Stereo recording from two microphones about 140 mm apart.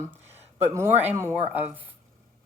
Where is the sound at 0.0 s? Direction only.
15° right (ahead or behind).